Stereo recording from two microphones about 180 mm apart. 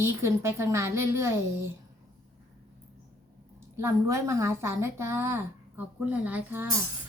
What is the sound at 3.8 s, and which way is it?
A woman's voice, 15° right (ahead or behind).